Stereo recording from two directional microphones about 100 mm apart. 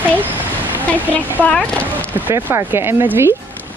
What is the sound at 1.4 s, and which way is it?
Speech, 10° left (ahead or behind).